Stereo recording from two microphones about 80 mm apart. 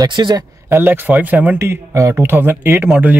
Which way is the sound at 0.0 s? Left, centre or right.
Right.